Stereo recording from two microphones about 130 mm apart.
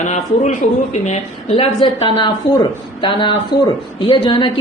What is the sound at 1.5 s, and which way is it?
Speech, 50° left (ahead or behind).